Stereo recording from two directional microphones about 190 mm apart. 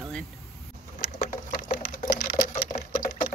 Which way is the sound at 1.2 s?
45° left (ahead or behind).